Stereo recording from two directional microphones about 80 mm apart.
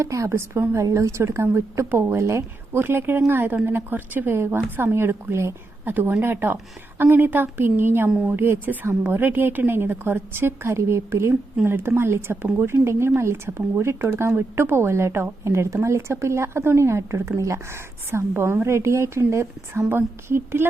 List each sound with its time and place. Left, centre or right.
0.0 s a woman's voice: right